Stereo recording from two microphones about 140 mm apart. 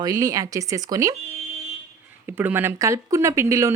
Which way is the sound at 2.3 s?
15° right (ahead or behind).